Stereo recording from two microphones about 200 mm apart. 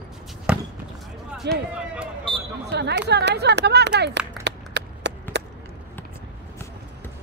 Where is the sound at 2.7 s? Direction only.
55° right (ahead or behind).